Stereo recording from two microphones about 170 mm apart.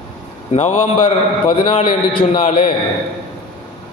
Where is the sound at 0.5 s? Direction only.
35° left (ahead or behind).